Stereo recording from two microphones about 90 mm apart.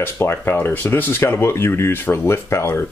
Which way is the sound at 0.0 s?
25° left (ahead or behind).